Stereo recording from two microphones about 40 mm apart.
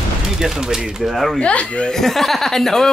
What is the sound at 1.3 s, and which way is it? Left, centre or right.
Speech, left.